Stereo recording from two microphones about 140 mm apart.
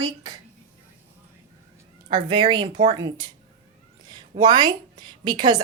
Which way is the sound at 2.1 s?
35° right (ahead or behind).